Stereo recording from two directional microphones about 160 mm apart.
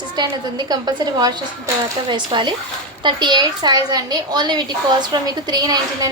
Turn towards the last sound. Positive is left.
turn(degrees=-25)  # may be behind; listen again after turning